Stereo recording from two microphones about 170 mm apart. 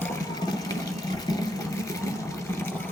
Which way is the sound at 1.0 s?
20° left (ahead or behind).